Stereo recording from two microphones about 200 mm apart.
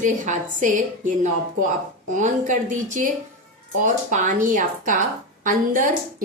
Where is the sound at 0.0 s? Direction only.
40° right (ahead or behind).